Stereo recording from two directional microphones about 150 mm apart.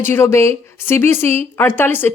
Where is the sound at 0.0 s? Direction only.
15° left (ahead or behind).